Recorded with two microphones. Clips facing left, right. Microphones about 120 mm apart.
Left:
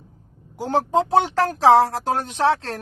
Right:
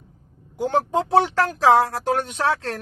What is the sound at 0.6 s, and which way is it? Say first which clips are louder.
Speech: left 1 dB; 35° left (ahead or behind).